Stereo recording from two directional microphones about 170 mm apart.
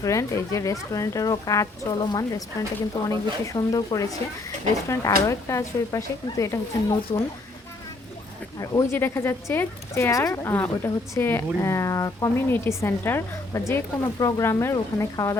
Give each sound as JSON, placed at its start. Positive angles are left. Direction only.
{"t": 0.0, "sound": "a woman's voice", "side_deg": 15}
{"t": 8.5, "sound": "speech", "side_deg": 15}